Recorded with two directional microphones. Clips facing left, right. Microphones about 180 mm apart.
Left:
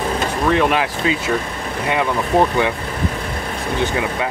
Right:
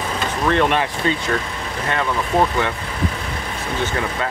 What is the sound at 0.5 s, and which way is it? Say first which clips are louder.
Speech: left 1 dB; 5° left (ahead or behind).